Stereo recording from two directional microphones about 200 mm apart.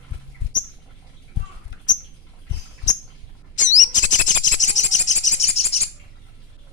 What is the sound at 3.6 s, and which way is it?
Bird, 40° left (ahead or behind).